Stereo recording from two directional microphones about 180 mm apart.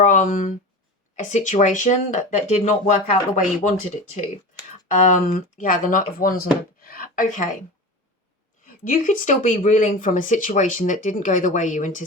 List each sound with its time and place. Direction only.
0.0 s speech: 45° left (ahead or behind)
5.0 s speech: 45° left (ahead or behind)
6.8 s a sound: 50° left (ahead or behind)
8.6 s speech: 50° left (ahead or behind)